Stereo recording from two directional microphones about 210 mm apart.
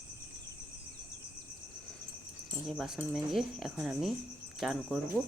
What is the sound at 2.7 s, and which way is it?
Speech, centre (ahead or behind).